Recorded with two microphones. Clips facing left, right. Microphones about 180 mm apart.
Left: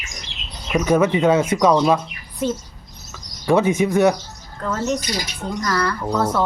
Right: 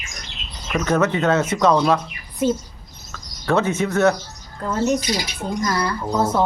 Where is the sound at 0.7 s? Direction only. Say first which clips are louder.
Left 3 dB; 10° left (ahead or behind).